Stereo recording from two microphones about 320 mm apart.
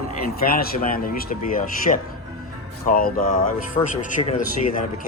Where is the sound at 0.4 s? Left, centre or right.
Left.